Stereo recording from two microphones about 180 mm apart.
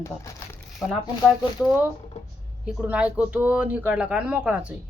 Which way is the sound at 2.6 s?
5° right (ahead or behind).